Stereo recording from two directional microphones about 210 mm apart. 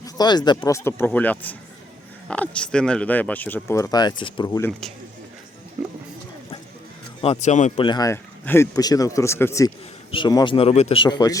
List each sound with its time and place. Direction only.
0.0 s speech: 20° left (ahead or behind)
7.2 s speech: 30° left (ahead or behind)
7.9 s speech: 15° left (ahead or behind)